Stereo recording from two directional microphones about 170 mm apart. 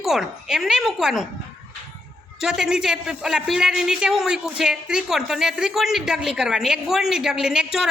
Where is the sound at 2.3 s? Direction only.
5° right (ahead or behind).